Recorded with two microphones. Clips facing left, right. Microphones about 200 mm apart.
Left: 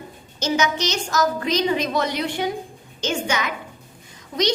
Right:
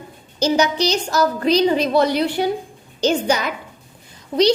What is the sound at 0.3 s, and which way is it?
A woman's voice, 35° right (ahead or behind).